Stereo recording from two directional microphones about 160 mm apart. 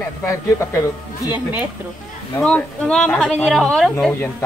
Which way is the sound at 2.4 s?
5° left (ahead or behind).